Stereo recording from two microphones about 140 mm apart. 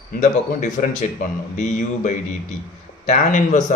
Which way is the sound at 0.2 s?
60° left (ahead or behind).